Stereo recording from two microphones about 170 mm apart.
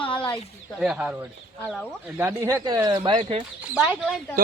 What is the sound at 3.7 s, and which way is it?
Speech, 5° right (ahead or behind).